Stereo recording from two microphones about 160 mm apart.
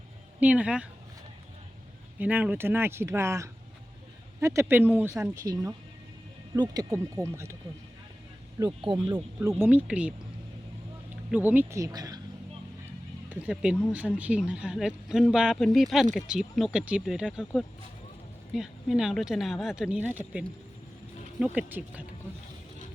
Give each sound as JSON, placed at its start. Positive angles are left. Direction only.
{"t": 0.3, "sound": "speech", "side_deg": -10}
{"t": 2.1, "sound": "speech", "side_deg": -10}
{"t": 8.8, "sound": "speech", "side_deg": -30}
{"t": 9.6, "sound": "speech", "side_deg": -10}
{"t": 11.3, "sound": "speech", "side_deg": -10}
{"t": 13.3, "sound": "speech", "side_deg": -10}